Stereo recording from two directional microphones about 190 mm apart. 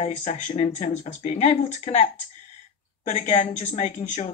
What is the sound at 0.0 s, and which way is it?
Speech, 35° left (ahead or behind).